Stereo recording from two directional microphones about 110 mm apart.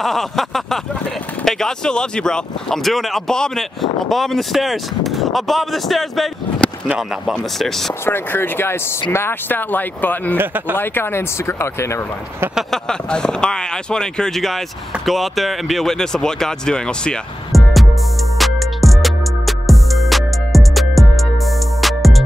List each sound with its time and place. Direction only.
0.0 s speech: centre (ahead or behind)
8.0 s speech: 20° left (ahead or behind)
10.3 s speech: 20° right (ahead or behind)
10.8 s speech: 20° left (ahead or behind)
12.5 s speech: 5° left (ahead or behind)
18.4 s music: centre (ahead or behind)